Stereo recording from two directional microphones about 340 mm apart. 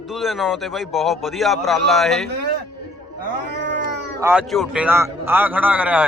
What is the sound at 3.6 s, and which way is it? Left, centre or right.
Cat, right.